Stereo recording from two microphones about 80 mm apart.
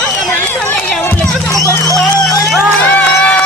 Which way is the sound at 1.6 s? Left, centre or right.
Left.